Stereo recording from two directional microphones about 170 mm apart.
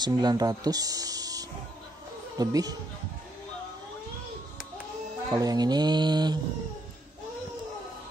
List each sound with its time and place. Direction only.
0.0 s speech: 25° right (ahead or behind)
5.3 s speech: 25° right (ahead or behind)